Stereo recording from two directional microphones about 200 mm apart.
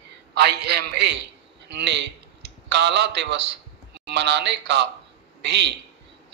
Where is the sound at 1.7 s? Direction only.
60° right (ahead or behind).